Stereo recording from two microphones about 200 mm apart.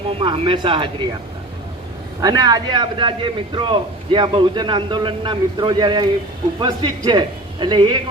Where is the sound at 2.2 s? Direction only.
20° right (ahead or behind).